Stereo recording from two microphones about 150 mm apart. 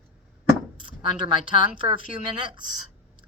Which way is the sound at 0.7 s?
35° right (ahead or behind).